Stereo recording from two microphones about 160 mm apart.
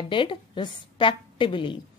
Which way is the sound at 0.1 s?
30° left (ahead or behind).